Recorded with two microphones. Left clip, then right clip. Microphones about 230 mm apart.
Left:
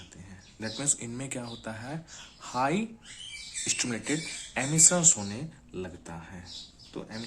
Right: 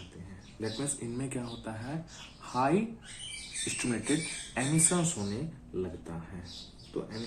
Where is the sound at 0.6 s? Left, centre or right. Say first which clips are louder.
Left 3 dB; left.